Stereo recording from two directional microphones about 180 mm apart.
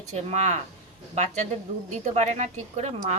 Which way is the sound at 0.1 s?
40° right (ahead or behind).